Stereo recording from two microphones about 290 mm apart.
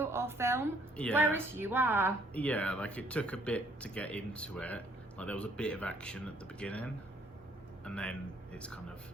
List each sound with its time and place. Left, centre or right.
0.0 s a woman's voice: centre
2.3 s speech: centre